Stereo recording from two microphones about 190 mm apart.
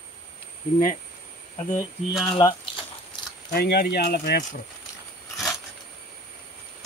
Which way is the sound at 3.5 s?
55° left (ahead or behind).